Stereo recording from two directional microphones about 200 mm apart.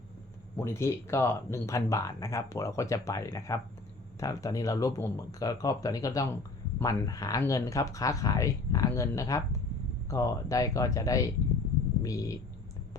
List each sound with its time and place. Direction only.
0.6 s speech: 15° left (ahead or behind)